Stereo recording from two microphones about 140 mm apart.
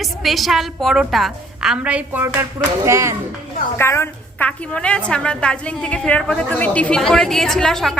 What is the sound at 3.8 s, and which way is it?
A woman's voice, 15° left (ahead or behind).